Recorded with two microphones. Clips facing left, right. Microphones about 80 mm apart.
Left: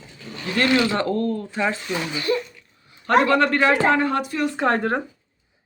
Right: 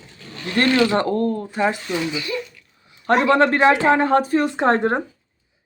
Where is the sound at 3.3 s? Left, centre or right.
Right.